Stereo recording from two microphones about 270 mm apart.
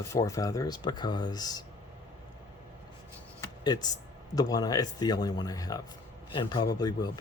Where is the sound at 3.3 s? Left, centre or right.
Centre.